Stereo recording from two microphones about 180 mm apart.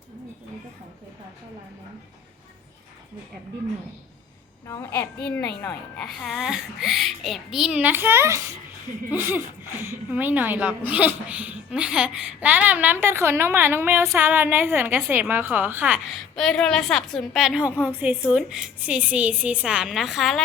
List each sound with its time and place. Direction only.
4.6 s a child's voice: 15° left (ahead or behind)
5.6 s a child's voice: 5° left (ahead or behind)